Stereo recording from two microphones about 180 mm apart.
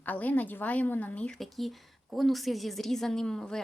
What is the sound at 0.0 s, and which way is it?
Speech, 10° left (ahead or behind).